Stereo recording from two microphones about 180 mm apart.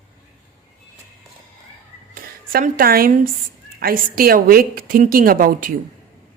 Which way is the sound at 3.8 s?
55° right (ahead or behind).